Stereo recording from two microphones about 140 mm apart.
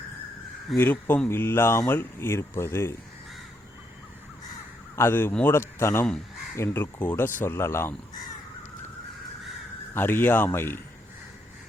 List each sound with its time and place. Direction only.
0.8 s speech: 15° left (ahead or behind)
4.9 s speech: 15° left (ahead or behind)
9.9 s speech: 15° left (ahead or behind)